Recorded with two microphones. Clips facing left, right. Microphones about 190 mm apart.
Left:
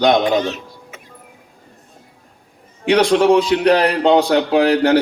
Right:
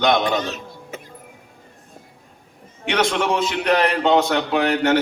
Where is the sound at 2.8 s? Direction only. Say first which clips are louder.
Left 8 dB; 35° left (ahead or behind).